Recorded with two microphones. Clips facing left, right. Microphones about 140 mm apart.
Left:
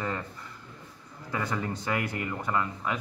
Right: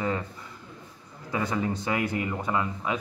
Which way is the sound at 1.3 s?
15° right (ahead or behind).